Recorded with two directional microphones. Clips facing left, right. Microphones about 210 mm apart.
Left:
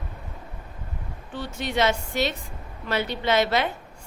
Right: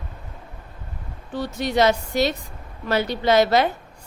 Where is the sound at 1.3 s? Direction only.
40° right (ahead or behind).